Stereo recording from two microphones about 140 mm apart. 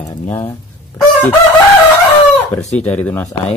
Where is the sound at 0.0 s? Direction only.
20° left (ahead or behind).